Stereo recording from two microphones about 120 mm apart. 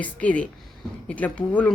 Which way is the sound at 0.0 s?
10° left (ahead or behind).